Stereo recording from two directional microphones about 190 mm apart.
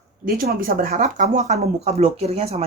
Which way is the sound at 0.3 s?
50° right (ahead or behind).